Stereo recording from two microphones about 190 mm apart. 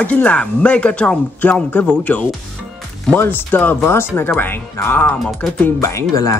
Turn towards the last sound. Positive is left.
turn(degrees=15)  # may be behind; listen again after turning